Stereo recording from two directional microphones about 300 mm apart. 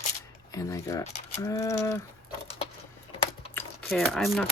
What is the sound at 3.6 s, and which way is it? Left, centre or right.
Speech, centre.